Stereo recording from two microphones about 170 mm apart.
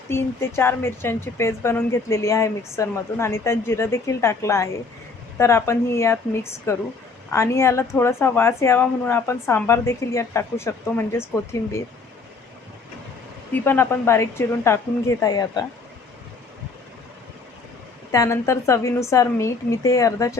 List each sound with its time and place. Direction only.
0.1 s speech: 15° left (ahead or behind)
13.5 s a woman's voice: 10° left (ahead or behind)
18.1 s a woman's voice: 20° left (ahead or behind)